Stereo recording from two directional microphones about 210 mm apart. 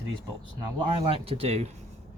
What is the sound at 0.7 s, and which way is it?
Speech, 25° right (ahead or behind).